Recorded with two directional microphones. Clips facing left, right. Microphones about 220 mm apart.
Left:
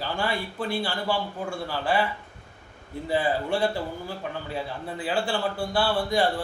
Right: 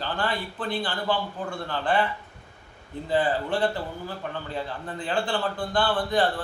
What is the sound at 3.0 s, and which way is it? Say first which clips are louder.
A man's voice: right 1 dB; 10° left (ahead or behind).